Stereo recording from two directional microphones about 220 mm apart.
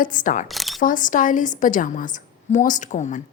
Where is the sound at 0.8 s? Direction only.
35° left (ahead or behind).